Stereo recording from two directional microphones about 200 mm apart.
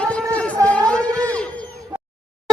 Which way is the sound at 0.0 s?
5° left (ahead or behind).